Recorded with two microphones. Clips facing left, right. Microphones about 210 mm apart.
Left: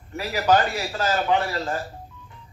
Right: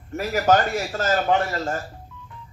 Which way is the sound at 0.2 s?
45° right (ahead or behind).